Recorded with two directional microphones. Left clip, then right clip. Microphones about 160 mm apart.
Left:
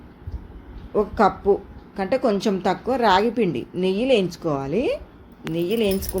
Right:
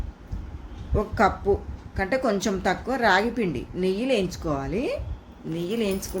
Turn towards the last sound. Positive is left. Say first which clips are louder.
# left 5 dB
turn(degrees=5)  # may be behind; listen again after turning